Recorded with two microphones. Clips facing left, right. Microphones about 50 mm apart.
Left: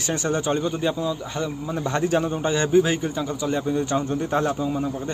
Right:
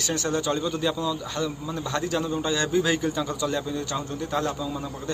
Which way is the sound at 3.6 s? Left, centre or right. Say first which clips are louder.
Left 6 dB; left.